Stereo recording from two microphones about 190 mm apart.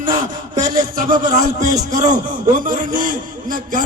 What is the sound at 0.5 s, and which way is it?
A man's voice, 40° right (ahead or behind).